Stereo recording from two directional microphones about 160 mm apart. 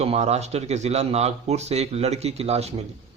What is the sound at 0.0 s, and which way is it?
A man's voice, 40° right (ahead or behind).